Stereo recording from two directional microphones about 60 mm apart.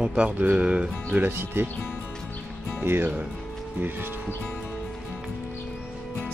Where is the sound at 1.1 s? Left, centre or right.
Right.